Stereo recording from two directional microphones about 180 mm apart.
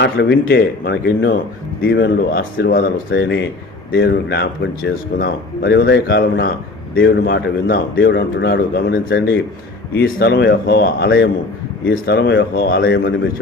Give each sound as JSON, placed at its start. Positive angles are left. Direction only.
{"t": 0.0, "sound": "speech", "side_deg": 70}
{"t": 12.5, "sound": "speech", "side_deg": 55}
{"t": 12.9, "sound": "speech", "side_deg": 75}